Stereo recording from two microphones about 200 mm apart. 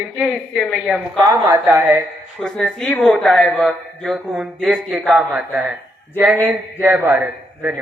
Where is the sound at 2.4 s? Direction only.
5° left (ahead or behind).